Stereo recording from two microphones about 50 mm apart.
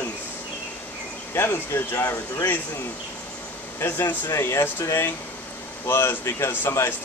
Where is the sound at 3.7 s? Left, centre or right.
Left.